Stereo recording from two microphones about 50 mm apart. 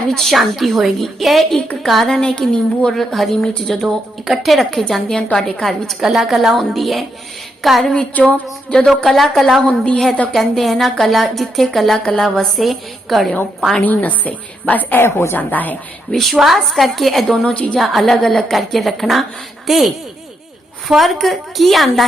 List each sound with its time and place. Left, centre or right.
0.1 s a woman's voice: centre
6.0 s a woman's voice: centre
8.1 s speech: left
9.0 s a woman's voice: centre
9.6 s a woman's voice: centre
10.3 s a woman's voice: centre
12.0 s a woman's voice: centre
13.8 s speech: left
16.1 s a woman's voice: centre
17.3 s a woman's voice: left
17.7 s a woman's voice: centre